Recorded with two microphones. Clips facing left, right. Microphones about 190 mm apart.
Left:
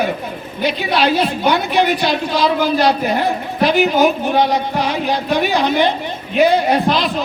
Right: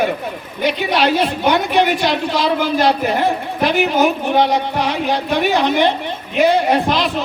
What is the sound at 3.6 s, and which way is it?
A woman's voice, 65° right (ahead or behind).